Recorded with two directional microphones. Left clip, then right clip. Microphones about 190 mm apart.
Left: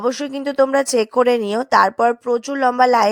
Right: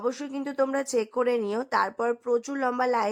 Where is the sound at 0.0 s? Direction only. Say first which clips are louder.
Left 9 dB; 30° left (ahead or behind).